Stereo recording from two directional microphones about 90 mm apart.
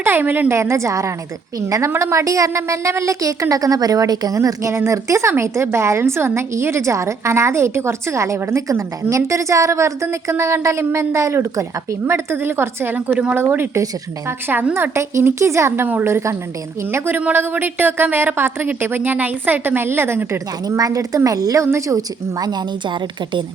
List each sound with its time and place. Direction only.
0.0 s a woman's voice: 25° right (ahead or behind)
20.7 s a woman's voice: 40° right (ahead or behind)